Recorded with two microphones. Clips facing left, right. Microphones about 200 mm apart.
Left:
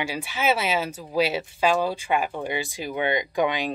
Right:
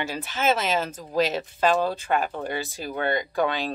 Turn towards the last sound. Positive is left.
turn(degrees=15)  # may be behind; listen again after turning